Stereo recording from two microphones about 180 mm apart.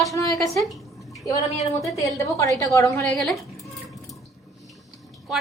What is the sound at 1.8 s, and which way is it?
A woman's voice, 15° left (ahead or behind).